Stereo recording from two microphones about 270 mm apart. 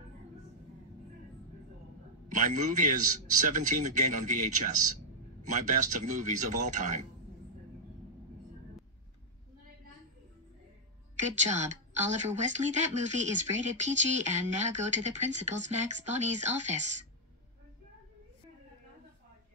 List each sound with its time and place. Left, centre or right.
2.2 s a man's voice: right
11.1 s speech: right